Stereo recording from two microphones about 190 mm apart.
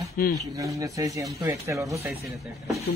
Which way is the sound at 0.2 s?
50° left (ahead or behind).